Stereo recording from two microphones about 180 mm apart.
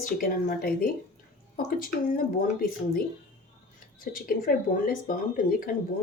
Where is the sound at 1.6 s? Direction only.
50° left (ahead or behind).